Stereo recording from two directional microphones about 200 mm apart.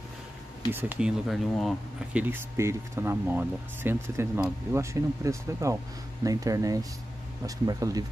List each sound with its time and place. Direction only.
0.7 s speech: 10° right (ahead or behind)
2.2 s speech: 10° right (ahead or behind)